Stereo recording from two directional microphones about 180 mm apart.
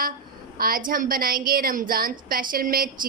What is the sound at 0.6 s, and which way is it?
A woman's voice, 50° right (ahead or behind).